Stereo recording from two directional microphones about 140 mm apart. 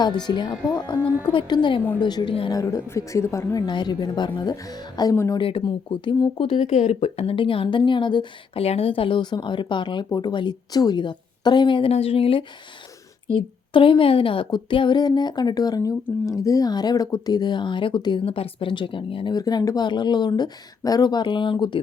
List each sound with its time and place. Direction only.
0.0 s a woman's voice: 30° left (ahead or behind)
3.7 s a woman's voice: 30° left (ahead or behind)
5.4 s speech: 40° left (ahead or behind)
13.7 s speech: 40° left (ahead or behind)